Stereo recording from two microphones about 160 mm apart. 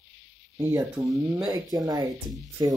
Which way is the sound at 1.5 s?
25° right (ahead or behind).